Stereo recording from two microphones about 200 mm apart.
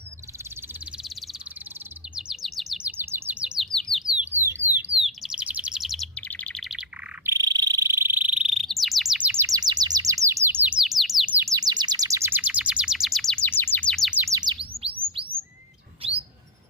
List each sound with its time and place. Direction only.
1.0 s frog: centre (ahead or behind)
2.1 s chirp: centre (ahead or behind)
4.2 s alarm: 10° right (ahead or behind)
5.0 s chirp: 5° right (ahead or behind)
7.3 s insect: 20° right (ahead or behind)
14.9 s bird: 5° right (ahead or behind)
16.0 s bird: 30° right (ahead or behind)